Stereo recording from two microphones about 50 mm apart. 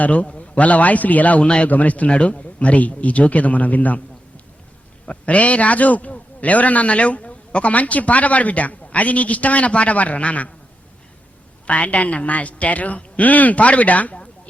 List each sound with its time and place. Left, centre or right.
0.0 s a man's voice: left
1.5 s a man's voice: centre
1.7 s speech: left
2.0 s a man's voice: centre
5.0 s a man's voice: left
11.6 s a man's voice: left